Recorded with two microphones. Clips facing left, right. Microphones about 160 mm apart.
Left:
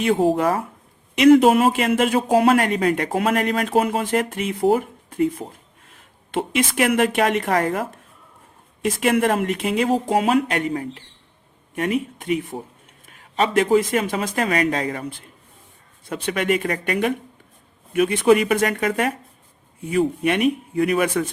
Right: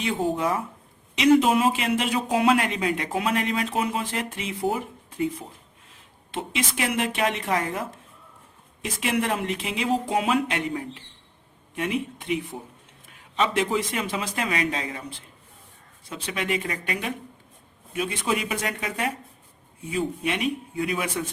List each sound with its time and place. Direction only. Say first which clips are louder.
0.0 s speech: left 7 dB; 60° left (ahead or behind)
1.1 s a man's voice: left 6 dB; 55° left (ahead or behind)
12.2 s a man's voice: left 5 dB; 50° left (ahead or behind)
16.0 s speech: left 7 dB; 55° left (ahead or behind)